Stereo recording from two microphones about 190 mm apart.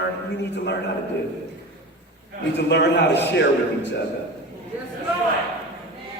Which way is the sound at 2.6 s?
65° left (ahead or behind).